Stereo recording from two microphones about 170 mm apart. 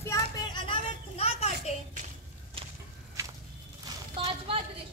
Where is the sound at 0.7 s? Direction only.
35° left (ahead or behind).